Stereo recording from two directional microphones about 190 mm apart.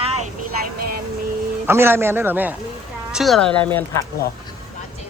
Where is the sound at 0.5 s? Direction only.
50° right (ahead or behind).